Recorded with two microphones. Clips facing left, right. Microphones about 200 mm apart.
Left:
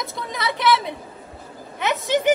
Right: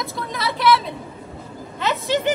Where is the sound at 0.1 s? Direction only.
20° left (ahead or behind).